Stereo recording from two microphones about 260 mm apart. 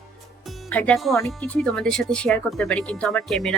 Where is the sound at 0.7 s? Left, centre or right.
Centre.